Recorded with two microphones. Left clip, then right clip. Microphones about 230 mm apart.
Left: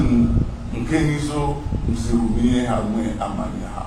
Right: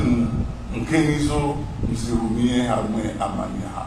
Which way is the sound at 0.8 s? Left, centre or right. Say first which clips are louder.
Right 1 dB; right.